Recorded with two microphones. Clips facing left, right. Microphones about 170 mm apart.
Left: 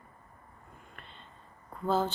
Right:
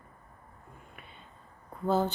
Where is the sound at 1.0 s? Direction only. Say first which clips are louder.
Even; 5° right (ahead or behind).